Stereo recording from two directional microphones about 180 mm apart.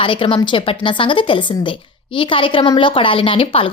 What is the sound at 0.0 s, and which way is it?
A woman's voice, 30° left (ahead or behind).